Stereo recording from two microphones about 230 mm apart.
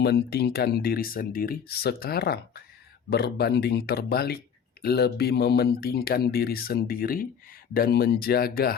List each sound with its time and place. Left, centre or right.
0.0 s speech: left